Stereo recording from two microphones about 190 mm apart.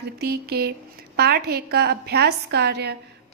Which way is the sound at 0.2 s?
55° right (ahead or behind).